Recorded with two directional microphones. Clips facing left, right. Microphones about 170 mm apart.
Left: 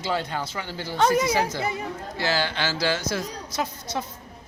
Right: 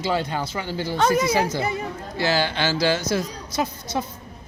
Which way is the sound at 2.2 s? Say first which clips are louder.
Right 4 dB; 15° right (ahead or behind).